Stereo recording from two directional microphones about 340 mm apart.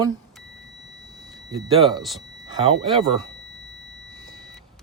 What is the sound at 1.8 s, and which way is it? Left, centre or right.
Speech, centre.